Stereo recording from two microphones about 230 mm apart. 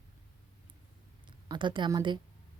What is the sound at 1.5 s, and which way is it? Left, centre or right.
Speech, right.